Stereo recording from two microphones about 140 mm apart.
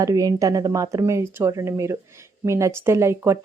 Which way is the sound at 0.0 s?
25° right (ahead or behind).